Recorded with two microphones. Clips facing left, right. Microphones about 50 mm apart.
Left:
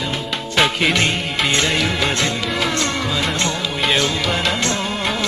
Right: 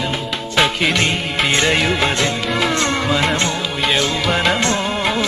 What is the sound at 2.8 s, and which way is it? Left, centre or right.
Music, right.